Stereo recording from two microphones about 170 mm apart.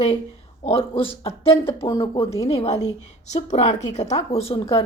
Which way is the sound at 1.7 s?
20° left (ahead or behind).